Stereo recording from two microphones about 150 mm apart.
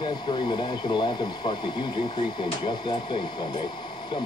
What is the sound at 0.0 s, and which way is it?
Speech, 30° left (ahead or behind).